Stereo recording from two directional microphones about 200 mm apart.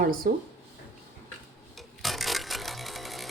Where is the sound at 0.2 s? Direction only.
45° right (ahead or behind).